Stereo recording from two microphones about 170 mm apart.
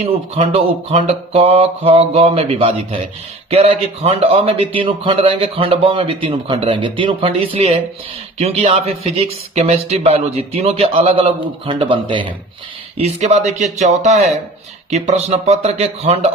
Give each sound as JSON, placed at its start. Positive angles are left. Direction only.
{"t": 0.0, "sound": "a man's voice", "side_deg": -35}